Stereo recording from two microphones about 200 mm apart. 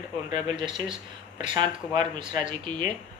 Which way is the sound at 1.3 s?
25° right (ahead or behind).